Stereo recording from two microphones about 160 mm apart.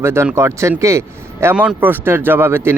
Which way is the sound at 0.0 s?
15° right (ahead or behind).